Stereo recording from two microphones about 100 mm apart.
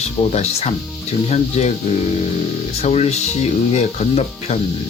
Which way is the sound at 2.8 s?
90° left.